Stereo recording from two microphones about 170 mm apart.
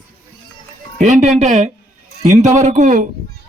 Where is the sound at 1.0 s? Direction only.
45° right (ahead or behind).